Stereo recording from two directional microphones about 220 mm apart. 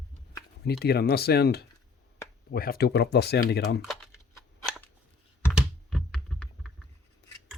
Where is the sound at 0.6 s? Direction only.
45° left (ahead or behind).